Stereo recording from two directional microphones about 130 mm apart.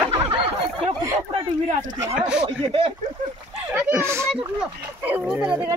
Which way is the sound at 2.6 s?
45° right (ahead or behind).